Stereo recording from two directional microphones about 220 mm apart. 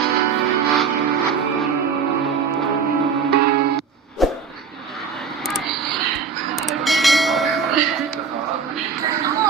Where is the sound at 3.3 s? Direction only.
45° right (ahead or behind).